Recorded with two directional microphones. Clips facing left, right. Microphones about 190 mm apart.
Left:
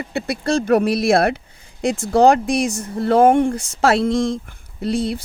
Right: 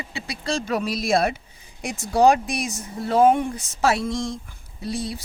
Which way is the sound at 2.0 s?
50° left (ahead or behind).